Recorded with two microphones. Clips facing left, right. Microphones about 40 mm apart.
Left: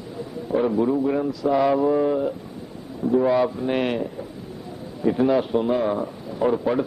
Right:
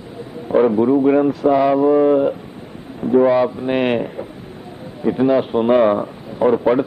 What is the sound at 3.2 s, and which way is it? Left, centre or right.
Speech, right.